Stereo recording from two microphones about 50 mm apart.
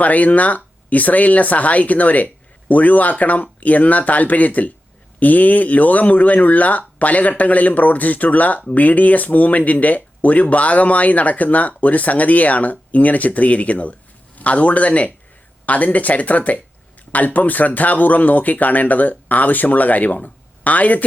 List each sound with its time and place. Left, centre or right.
0.0 s speech: left